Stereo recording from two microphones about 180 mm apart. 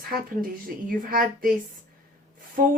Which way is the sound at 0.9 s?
50° right (ahead or behind).